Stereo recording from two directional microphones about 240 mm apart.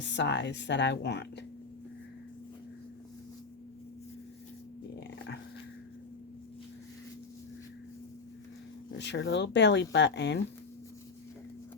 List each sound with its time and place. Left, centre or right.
0.0 s speech: left
8.9 s speech: left